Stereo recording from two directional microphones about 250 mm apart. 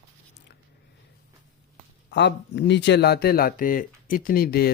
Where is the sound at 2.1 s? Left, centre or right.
Left.